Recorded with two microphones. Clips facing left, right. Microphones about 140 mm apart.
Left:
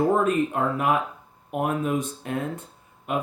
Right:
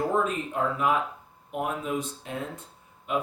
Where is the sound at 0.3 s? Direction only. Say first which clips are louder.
Left 6 dB; 55° left (ahead or behind).